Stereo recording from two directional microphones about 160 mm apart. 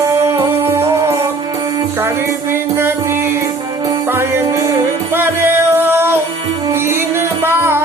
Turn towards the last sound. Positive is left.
turn(degrees=-15)  # may be behind; listen again after turning